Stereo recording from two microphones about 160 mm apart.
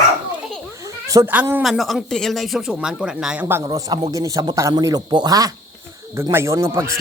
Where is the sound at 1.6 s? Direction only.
Centre (ahead or behind).